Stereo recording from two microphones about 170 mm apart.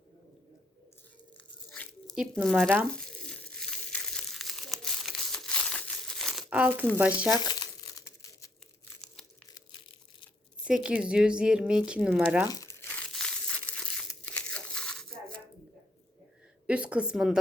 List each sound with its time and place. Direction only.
1.7 s a sound: 5° left (ahead or behind)
2.1 s speech: centre (ahead or behind)
2.6 s speech: 10° right (ahead or behind)
2.9 s crumpling: 5° left (ahead or behind); by 6.8 s 10° right (ahead or behind)
7.0 s speech: 10° right (ahead or behind)
7.3 s crumpling: 25° left (ahead or behind)
9.6 s crushing: 30° left (ahead or behind)
10.6 s speech: 5° right (ahead or behind)
12.5 s speech: 20° left (ahead or behind)
12.8 s crumpling: 5° left (ahead or behind)
16.6 s speech: 5° right (ahead or behind)